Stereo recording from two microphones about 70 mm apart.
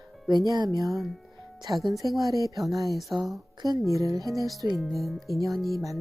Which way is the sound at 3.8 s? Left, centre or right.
Right.